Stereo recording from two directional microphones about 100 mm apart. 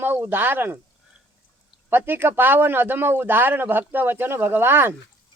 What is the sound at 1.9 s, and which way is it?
Speech, 20° right (ahead or behind).